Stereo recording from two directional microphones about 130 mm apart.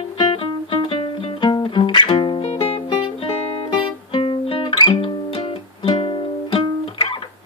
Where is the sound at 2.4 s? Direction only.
50° left (ahead or behind).